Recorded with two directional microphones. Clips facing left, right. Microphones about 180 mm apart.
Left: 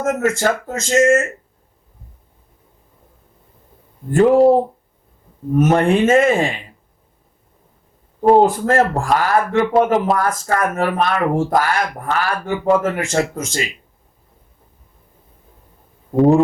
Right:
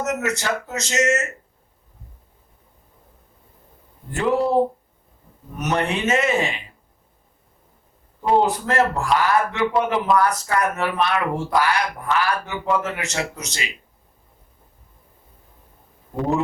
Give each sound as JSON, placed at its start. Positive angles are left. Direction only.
{"t": 0.0, "sound": "a man's voice", "side_deg": 50}
{"t": 4.1, "sound": "a man's voice", "side_deg": 50}
{"t": 5.5, "sound": "a man's voice", "side_deg": 50}
{"t": 8.2, "sound": "a man's voice", "side_deg": 45}